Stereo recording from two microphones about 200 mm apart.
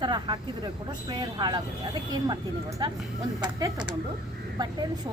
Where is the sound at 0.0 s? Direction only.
20° right (ahead or behind).